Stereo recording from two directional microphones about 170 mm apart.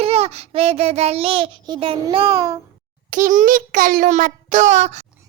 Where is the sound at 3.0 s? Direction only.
50° right (ahead or behind).